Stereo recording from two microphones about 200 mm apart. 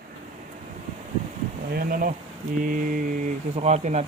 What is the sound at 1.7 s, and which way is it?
Speech, 45° right (ahead or behind).